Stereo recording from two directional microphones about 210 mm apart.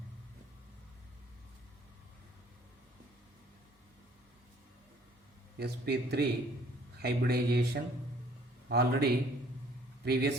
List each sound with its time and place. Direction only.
5.5 s speech: 50° right (ahead or behind)